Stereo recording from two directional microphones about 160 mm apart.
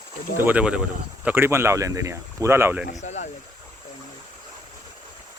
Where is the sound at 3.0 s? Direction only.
50° left (ahead or behind).